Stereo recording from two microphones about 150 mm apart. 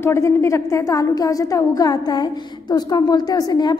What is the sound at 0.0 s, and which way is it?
A woman's voice, 15° left (ahead or behind).